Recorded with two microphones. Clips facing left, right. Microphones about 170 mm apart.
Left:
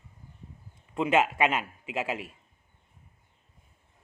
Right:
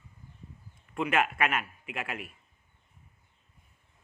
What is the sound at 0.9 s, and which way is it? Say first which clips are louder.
Speech: left 4 dB; 25° left (ahead or behind).